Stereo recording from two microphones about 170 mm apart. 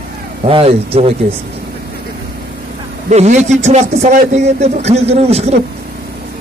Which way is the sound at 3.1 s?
40° right (ahead or behind).